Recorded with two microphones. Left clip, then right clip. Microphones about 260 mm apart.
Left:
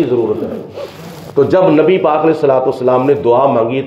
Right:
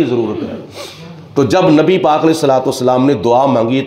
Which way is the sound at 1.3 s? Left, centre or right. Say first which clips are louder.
Left 1 dB; right.